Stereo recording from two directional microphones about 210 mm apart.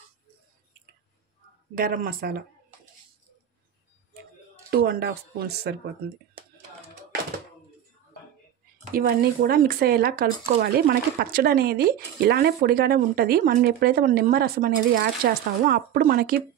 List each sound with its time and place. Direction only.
1.8 s speech: 45° right (ahead or behind)
4.6 s speech: 45° right (ahead or behind)
8.9 s speech: 45° right (ahead or behind)